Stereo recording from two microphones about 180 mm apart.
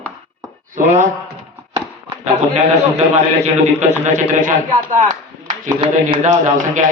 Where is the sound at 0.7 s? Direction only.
45° right (ahead or behind).